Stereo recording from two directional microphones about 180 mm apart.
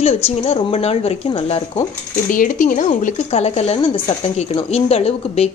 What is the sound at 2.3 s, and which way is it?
A woman's voice, 50° left (ahead or behind).